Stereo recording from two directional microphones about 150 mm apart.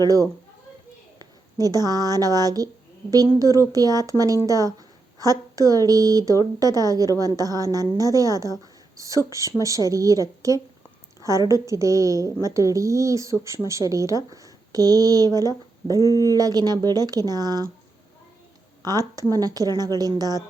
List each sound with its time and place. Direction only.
0.0 s speech: 25° right (ahead or behind)
15.9 s speech: 20° left (ahead or behind)
16.3 s speech: 25° right (ahead or behind)
18.8 s speech: 25° right (ahead or behind)